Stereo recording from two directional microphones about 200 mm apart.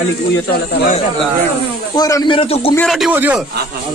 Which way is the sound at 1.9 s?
20° left (ahead or behind).